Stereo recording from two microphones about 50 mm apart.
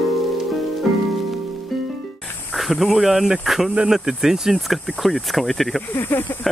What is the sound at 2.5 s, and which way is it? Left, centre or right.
Speech, centre.